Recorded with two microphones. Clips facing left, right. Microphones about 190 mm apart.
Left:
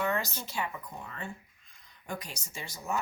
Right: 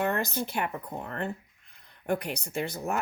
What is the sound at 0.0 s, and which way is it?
Speech, 55° right (ahead or behind).